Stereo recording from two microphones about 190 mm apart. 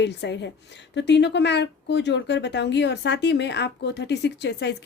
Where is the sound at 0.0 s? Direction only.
65° left (ahead or behind).